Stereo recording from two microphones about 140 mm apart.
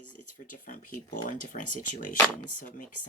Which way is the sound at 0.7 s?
70° left (ahead or behind).